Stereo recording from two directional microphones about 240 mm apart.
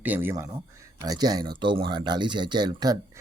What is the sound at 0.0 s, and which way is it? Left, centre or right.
Speech, centre.